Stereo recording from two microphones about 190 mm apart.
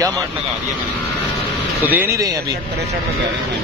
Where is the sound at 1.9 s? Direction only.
10° right (ahead or behind).